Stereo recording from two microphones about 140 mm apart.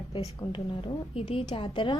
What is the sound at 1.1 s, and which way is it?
Speech, 45° left (ahead or behind).